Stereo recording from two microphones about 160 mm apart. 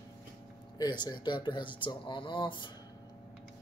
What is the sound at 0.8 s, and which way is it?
Speech, 25° left (ahead or behind).